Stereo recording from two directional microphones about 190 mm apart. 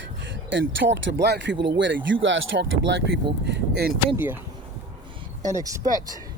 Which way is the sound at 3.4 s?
60° right (ahead or behind).